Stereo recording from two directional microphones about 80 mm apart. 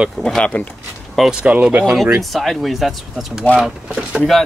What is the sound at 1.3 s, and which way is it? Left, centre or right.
Speech, centre.